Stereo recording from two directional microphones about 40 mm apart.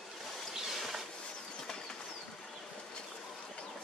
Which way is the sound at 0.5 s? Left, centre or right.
Centre.